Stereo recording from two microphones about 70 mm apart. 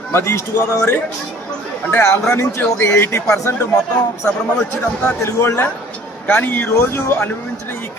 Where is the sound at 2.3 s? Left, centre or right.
Left.